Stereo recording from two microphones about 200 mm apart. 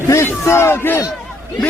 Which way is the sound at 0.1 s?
15° left (ahead or behind).